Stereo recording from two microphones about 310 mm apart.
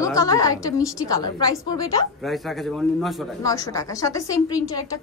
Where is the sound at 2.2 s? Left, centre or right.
Centre.